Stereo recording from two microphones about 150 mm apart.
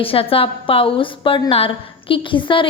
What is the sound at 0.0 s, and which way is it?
A woman's voice, 40° left (ahead or behind).